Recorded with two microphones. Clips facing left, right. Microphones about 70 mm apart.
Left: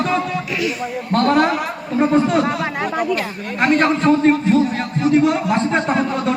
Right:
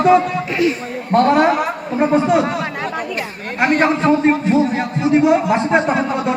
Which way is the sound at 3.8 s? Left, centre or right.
Centre.